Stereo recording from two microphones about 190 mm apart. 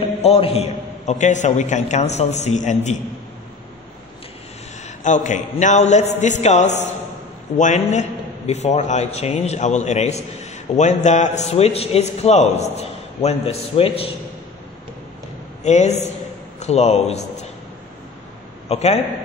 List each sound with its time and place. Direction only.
0.0 s a man's voice: 30° left (ahead or behind)
4.8 s a man's voice: 40° left (ahead or behind)
15.6 s a man's voice: 35° left (ahead or behind)
18.7 s a man's voice: 35° left (ahead or behind)